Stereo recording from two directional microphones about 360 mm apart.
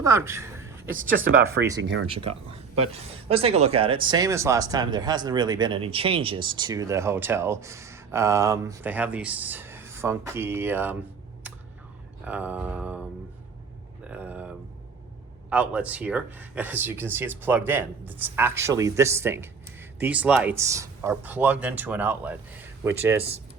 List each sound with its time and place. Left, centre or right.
0.0 s a sound: centre
1.0 s speech: centre
1.8 s speech: right
2.5 s speech: centre
12.2 s speech: centre
14.1 s a sound: centre
15.4 s speech: centre